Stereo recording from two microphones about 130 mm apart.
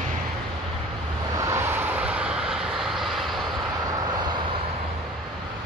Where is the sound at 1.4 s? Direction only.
20° right (ahead or behind); by 3.4 s centre (ahead or behind).